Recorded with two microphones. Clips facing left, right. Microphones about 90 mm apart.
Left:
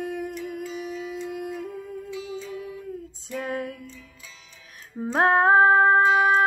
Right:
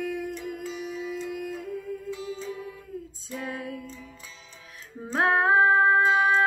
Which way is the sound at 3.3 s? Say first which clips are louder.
Left 5 dB; 50° left (ahead or behind).